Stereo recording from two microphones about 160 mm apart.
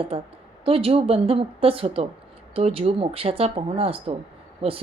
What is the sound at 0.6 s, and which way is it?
Speech, 35° right (ahead or behind).